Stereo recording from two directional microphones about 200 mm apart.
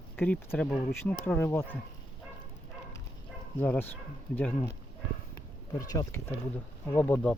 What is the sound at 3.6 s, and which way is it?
Speech, 10° left (ahead or behind).